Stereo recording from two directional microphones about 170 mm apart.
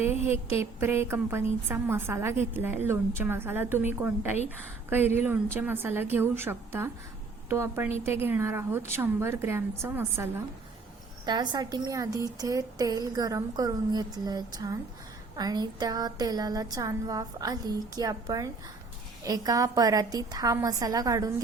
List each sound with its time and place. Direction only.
0.3 s a woman's voice: 15° right (ahead or behind)
11.3 s a woman's voice: 25° right (ahead or behind)